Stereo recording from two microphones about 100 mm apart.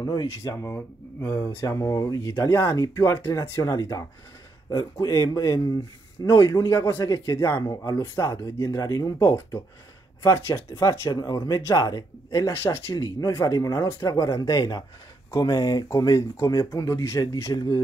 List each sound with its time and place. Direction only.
0.0 s speech: 40° left (ahead or behind)
5.0 s speech: 35° left (ahead or behind)
12.9 s speech: 40° left (ahead or behind)